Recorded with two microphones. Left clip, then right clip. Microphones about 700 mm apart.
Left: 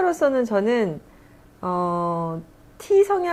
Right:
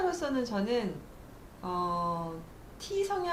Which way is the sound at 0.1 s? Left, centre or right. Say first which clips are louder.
Left 13 dB; left.